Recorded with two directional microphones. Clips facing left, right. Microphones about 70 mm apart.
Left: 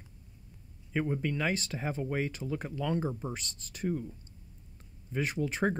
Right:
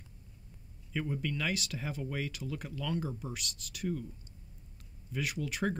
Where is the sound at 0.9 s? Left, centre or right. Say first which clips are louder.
Left 4 dB; left.